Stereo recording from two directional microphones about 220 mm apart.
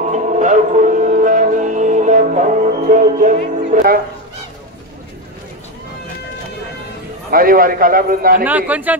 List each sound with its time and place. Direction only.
0.1 s music: 35° right (ahead or behind)
7.2 s a man's voice: 40° right (ahead or behind)
8.5 s speech: 5° right (ahead or behind)